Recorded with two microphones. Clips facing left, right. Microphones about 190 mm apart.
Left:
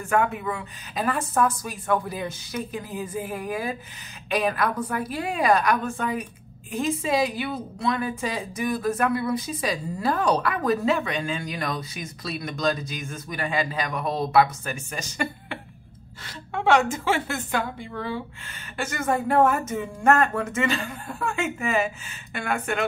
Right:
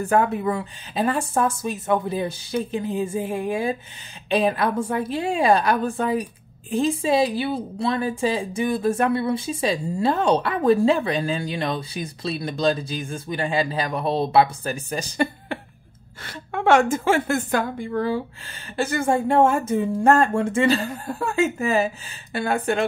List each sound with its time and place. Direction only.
0.0 s a woman's voice: 35° right (ahead or behind)
16.3 s a woman's voice: 50° right (ahead or behind)
18.8 s speech: 30° right (ahead or behind)